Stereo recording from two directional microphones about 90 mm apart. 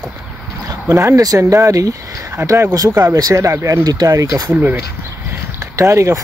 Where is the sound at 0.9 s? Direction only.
30° right (ahead or behind).